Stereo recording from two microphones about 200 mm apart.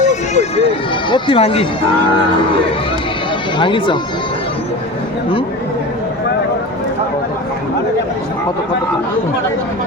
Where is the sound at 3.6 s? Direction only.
25° left (ahead or behind).